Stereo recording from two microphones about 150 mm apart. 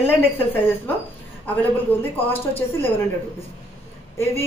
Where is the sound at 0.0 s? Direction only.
15° left (ahead or behind).